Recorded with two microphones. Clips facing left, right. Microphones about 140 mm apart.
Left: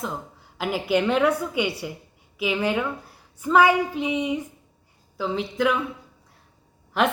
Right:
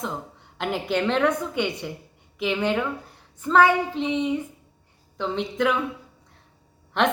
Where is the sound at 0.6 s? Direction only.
5° left (ahead or behind).